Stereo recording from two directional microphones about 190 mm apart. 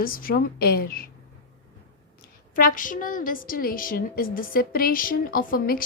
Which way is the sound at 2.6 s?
45° left (ahead or behind).